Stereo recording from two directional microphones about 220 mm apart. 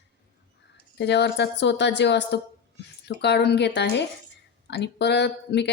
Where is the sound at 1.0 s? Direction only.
50° left (ahead or behind).